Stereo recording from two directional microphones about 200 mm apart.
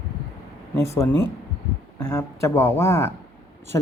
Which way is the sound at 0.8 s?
15° left (ahead or behind).